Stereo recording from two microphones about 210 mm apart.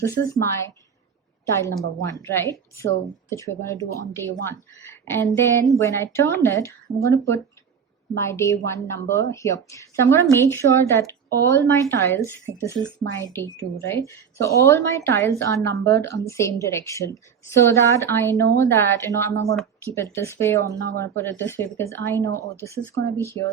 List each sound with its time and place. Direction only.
0.0 s a woman's voice: 15° left (ahead or behind)
20.7 s speech: 60° right (ahead or behind)
21.0 s a woman's voice: 10° left (ahead or behind)